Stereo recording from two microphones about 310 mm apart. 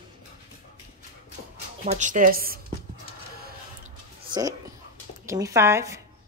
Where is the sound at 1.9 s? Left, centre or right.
Right.